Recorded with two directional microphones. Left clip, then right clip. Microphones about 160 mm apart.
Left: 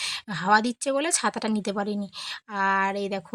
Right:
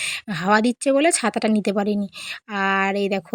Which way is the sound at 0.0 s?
20° right (ahead or behind).